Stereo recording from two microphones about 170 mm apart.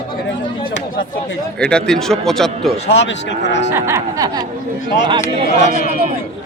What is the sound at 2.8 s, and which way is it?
Speech, 90° left.